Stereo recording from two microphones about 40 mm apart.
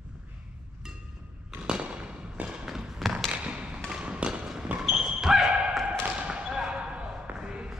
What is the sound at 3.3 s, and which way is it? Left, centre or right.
Thump, right.